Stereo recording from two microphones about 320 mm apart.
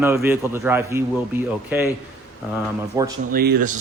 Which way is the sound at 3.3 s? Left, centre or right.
Right.